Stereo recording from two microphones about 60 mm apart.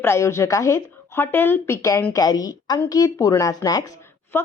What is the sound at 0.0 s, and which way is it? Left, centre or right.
Speech, left.